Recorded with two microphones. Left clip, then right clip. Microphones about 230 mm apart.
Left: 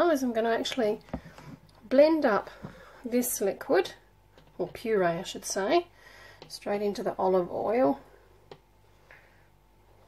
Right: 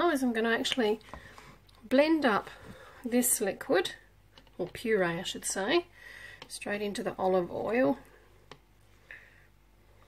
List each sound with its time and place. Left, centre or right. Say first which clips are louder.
0.0 s speech: left 3 dB; right
2.0 s speech: left 4 dB; right